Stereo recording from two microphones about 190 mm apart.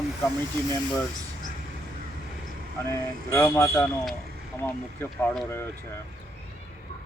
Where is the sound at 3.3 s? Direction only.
15° left (ahead or behind).